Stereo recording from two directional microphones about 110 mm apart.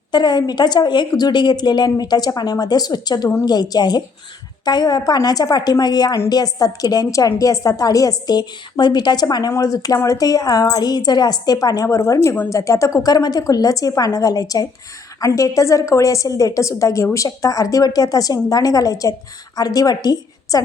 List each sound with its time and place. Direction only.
0.1 s a woman's voice: 40° left (ahead or behind)